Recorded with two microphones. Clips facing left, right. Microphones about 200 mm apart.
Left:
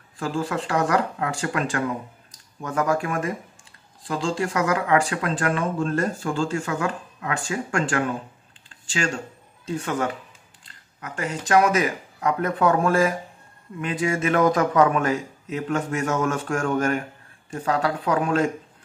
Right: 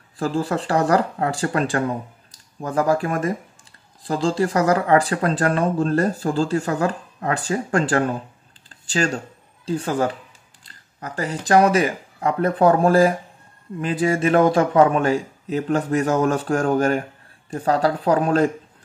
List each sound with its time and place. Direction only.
0.2 s speech: 35° right (ahead or behind)
8.6 s a sound: 35° right (ahead or behind)
9.7 s speech: 30° right (ahead or behind)